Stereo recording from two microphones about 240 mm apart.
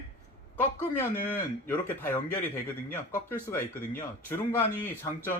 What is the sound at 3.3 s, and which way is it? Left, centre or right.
A man's voice, centre.